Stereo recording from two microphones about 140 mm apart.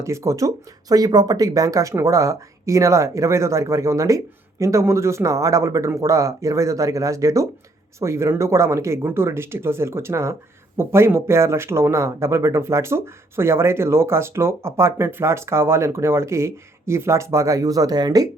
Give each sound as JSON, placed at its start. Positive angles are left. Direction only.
{"t": 0.0, "sound": "speech", "side_deg": -20}